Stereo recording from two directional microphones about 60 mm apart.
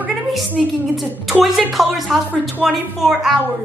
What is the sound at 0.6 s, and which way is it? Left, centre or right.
Speech, centre.